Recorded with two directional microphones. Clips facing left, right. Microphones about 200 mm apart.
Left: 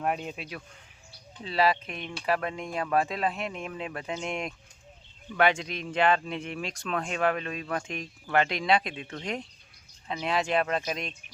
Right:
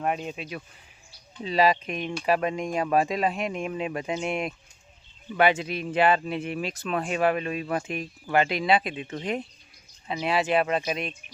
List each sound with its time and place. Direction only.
0.0 s speech: centre (ahead or behind)
1.5 s speech: 15° right (ahead or behind)